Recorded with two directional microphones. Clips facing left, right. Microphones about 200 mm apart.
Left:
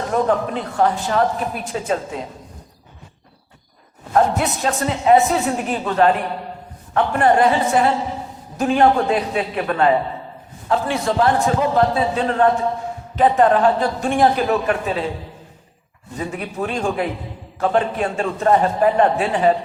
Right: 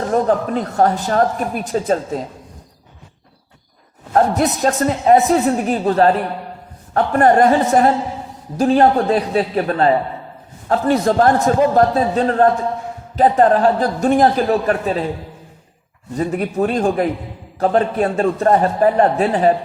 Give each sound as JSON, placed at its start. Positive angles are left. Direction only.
{"t": 0.1, "sound": "a woman's voice", "side_deg": -40}
{"t": 4.1, "sound": "a man's voice", "side_deg": -40}
{"t": 16.1, "sound": "a woman's voice", "side_deg": -45}